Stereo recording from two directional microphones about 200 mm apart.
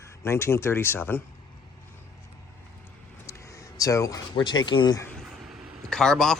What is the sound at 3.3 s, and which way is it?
Speech, 15° left (ahead or behind).